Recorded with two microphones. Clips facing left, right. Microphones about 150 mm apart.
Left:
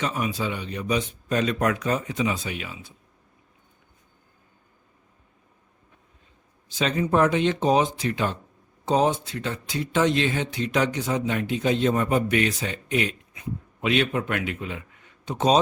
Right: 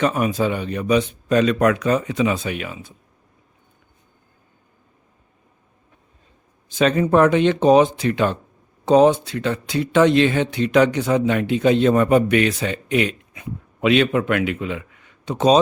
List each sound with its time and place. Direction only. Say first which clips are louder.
0.0 s speech: right 8 dB; 55° right (ahead or behind)
6.7 s speech: right 7 dB; 60° right (ahead or behind); by 15.5 s 90° right